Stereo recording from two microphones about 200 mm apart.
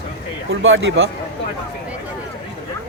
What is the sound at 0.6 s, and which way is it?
Speech, 75° right (ahead or behind).